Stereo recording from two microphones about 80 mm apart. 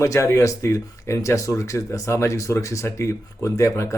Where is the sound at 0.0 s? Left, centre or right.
Left.